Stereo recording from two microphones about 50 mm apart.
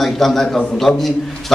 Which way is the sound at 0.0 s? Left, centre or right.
Centre.